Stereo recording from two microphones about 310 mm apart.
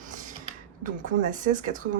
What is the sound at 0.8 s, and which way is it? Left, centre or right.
Speech, right.